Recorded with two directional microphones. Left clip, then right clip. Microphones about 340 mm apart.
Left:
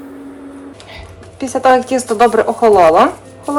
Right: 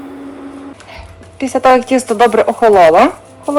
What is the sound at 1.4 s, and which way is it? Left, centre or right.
Speech, right.